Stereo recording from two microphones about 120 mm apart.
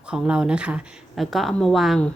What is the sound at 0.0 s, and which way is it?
Speech, 10° right (ahead or behind).